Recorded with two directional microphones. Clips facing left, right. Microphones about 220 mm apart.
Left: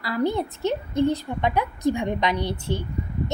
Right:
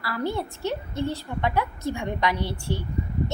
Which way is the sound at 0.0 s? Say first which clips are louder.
Left 4 dB; 20° left (ahead or behind).